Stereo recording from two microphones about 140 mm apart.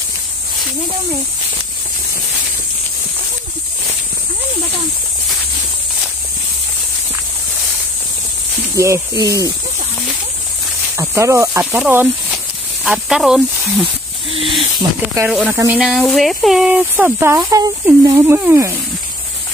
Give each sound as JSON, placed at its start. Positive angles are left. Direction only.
{"t": 8.7, "sound": "speech", "side_deg": -20}
{"t": 11.0, "sound": "speech", "side_deg": -20}
{"t": 11.8, "sound": "speech", "side_deg": -10}
{"t": 14.3, "sound": "snake", "side_deg": -40}
{"t": 15.2, "sound": "speech", "side_deg": -10}
{"t": 15.8, "sound": "speech", "side_deg": 0}